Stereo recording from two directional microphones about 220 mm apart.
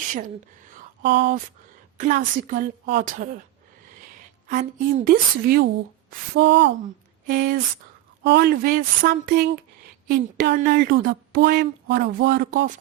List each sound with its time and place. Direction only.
1.0 s speech: 50° right (ahead or behind)
2.0 s a woman's voice: 35° right (ahead or behind)
4.4 s speech: 35° right (ahead or behind); by 6.7 s 55° right (ahead or behind)
7.3 s a woman's voice: 40° right (ahead or behind)